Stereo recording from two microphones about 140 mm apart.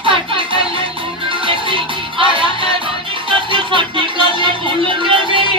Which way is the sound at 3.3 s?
35° right (ahead or behind).